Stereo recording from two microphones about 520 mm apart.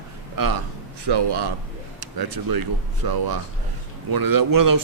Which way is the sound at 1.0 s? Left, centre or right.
Right.